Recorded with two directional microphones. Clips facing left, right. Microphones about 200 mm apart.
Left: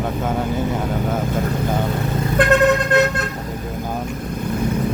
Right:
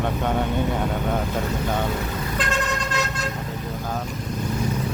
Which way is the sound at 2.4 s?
60° left (ahead or behind).